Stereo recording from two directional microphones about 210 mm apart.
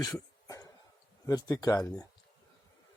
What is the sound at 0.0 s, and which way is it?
Cough, 15° left (ahead or behind).